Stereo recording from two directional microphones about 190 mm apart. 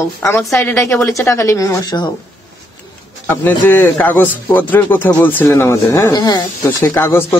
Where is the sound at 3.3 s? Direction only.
10° left (ahead or behind).